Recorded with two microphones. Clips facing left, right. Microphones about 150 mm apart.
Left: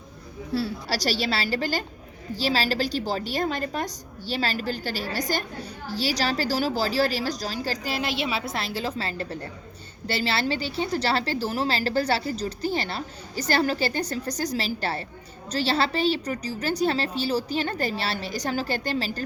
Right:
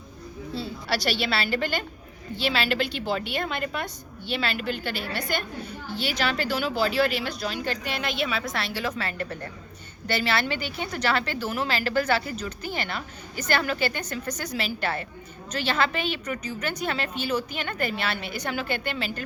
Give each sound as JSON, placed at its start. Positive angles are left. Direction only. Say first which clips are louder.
{"t": 0.9, "sound": "a woman's voice", "louder": "right 4 dB", "side_deg": 40}